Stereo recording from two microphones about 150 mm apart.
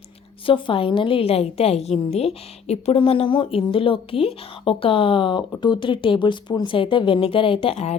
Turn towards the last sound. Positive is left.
turn(degrees=45)  # may be behind; listen again after turning